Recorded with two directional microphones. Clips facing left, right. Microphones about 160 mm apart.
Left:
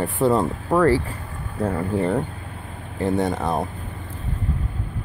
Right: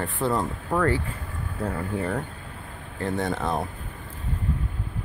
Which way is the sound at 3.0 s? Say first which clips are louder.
Left 5 dB; 20° left (ahead or behind).